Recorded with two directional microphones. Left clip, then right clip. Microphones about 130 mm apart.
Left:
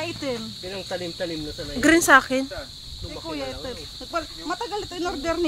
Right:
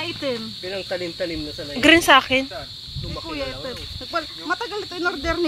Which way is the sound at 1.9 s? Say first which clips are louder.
Right 2 dB; 15° left (ahead or behind).